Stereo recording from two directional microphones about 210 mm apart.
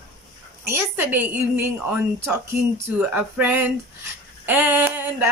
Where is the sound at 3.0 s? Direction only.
10° right (ahead or behind).